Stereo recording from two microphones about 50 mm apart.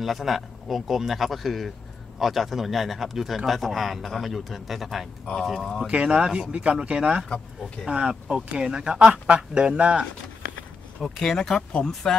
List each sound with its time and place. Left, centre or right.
0.0 s speech: centre
5.9 s speech: right
7.2 s speech: centre
7.8 s speech: centre
11.0 s speech: centre
11.3 s speech: centre